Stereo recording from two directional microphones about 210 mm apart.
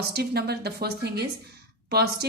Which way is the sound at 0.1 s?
50° right (ahead or behind).